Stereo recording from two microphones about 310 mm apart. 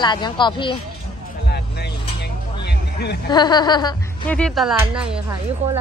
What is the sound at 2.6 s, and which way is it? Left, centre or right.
Music, left.